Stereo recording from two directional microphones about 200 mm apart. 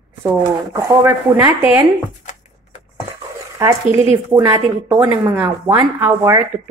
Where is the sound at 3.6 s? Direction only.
10° right (ahead or behind).